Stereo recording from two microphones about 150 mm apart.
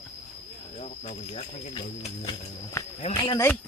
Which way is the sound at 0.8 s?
45° left (ahead or behind).